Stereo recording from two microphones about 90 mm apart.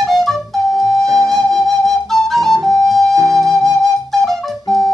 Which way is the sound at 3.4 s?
Centre (ahead or behind).